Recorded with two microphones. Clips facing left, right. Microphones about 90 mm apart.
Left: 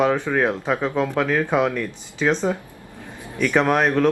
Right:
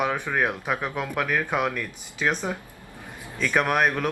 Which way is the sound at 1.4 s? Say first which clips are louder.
Left 6 dB; 15° left (ahead or behind).